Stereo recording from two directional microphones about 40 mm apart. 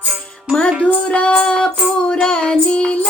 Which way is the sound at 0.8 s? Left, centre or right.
Left.